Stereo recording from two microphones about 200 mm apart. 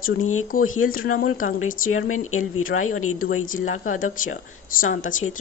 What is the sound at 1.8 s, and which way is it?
Speech, 90° left.